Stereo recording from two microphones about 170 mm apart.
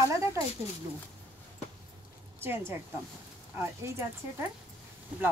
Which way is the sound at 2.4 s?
15° right (ahead or behind).